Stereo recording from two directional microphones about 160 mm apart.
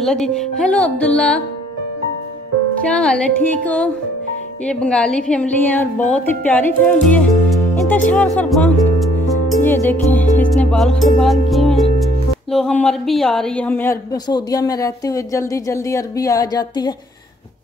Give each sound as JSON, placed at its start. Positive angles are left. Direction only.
{"t": 0.0, "sound": "a woman's voice", "side_deg": 5}
{"t": 2.8, "sound": "a woman's voice", "side_deg": 5}
{"t": 8.4, "sound": "music", "side_deg": 10}
{"t": 9.6, "sound": "music", "side_deg": 10}
{"t": 11.5, "sound": "speech", "side_deg": 0}
{"t": 14.1, "sound": "speech", "side_deg": 25}